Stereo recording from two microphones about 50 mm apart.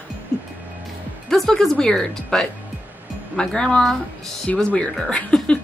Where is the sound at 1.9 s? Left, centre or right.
Centre; by 5.3 s left.